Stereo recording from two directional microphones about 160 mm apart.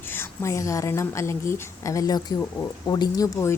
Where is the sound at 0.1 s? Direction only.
15° left (ahead or behind).